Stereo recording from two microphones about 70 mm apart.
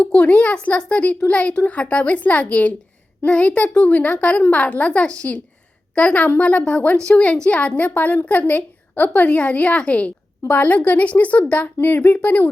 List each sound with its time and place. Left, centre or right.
0.0 s a woman's voice: centre